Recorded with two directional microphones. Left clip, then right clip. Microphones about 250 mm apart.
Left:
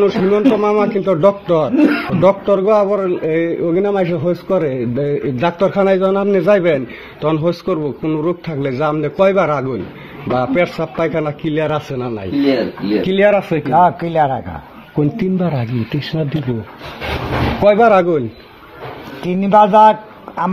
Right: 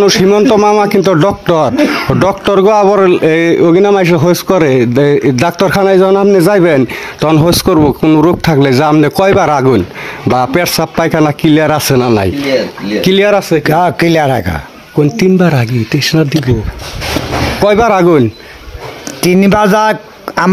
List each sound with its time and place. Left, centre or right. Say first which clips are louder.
0.0 s a man's voice: right 6 dB; right
13.7 s a man's voice: even; right
17.6 s a man's voice: right 2 dB; right
19.2 s speech: right 3 dB; right